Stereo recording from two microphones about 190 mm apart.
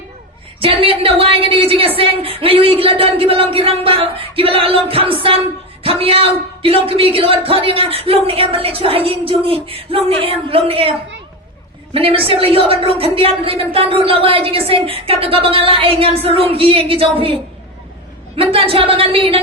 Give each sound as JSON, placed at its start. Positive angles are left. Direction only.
{"t": 0.6, "sound": "speech", "side_deg": -30}
{"t": 11.9, "sound": "speech", "side_deg": -30}
{"t": 18.3, "sound": "speech", "side_deg": -30}